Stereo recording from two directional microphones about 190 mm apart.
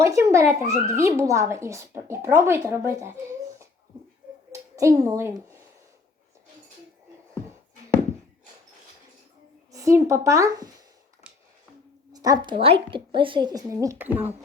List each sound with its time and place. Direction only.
0.0 s speech: 15° right (ahead or behind)
4.5 s a child's voice: 15° right (ahead or behind)
9.7 s speech: 15° right (ahead or behind)
11.3 s a sound: 5° right (ahead or behind)
12.1 s a woman's voice: 20° right (ahead or behind)